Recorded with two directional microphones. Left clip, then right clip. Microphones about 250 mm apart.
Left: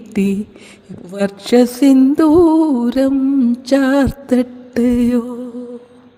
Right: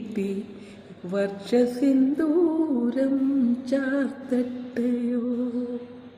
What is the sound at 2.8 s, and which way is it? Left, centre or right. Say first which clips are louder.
Mantra: left 9 dB; left.